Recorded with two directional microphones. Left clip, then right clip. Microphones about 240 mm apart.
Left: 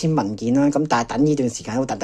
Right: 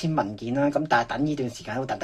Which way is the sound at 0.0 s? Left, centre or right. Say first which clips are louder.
Left 5 dB; left.